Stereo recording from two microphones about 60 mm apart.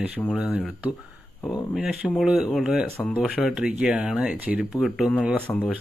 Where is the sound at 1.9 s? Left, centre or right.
Centre.